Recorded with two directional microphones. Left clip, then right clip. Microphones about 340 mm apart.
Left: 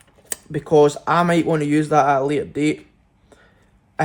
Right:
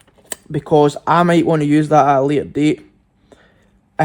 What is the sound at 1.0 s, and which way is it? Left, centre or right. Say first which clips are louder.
Speech: right 4 dB; centre.